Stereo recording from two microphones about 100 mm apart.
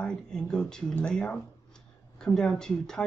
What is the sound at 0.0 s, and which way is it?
Speech, 5° left (ahead or behind).